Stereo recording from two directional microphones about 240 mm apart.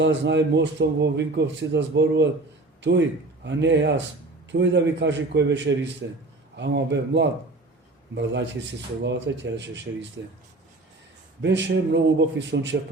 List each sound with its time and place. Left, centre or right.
0.0 s a man's voice: right
11.4 s a man's voice: right